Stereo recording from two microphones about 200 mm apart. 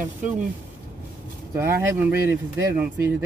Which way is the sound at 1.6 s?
10° right (ahead or behind).